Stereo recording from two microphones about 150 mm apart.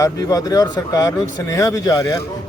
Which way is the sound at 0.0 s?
25° left (ahead or behind).